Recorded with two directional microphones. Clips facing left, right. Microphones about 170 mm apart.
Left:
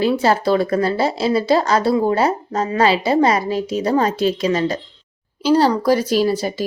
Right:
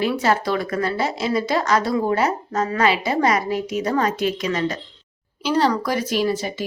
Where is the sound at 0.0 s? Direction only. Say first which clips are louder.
Left 4 dB; 30° left (ahead or behind).